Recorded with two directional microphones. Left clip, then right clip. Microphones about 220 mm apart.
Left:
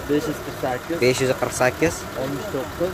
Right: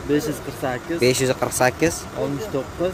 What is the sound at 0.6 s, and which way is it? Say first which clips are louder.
Speech: left 1 dB; 45° right (ahead or behind).